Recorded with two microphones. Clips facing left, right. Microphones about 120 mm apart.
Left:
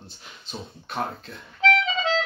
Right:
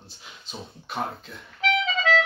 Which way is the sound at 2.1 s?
25° left (ahead or behind).